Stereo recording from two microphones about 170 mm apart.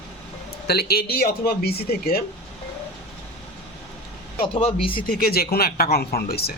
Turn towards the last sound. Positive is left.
turn(degrees=65)  # may be behind; listen again after turning